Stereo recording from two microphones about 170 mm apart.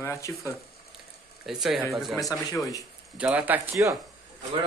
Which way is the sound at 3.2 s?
10° right (ahead or behind).